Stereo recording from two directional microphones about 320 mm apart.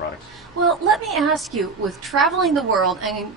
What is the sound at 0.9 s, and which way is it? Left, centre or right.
A woman's voice, centre.